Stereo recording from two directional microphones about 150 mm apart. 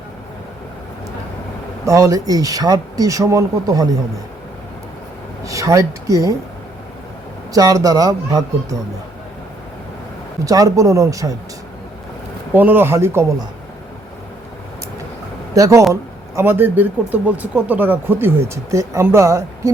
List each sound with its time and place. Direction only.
1.8 s speech: 20° right (ahead or behind)
5.5 s speech: 20° right (ahead or behind)
7.5 s speech: 25° right (ahead or behind)
10.4 s speech: 25° right (ahead or behind)
12.5 s speech: 15° right (ahead or behind)
15.5 s speech: 25° right (ahead or behind)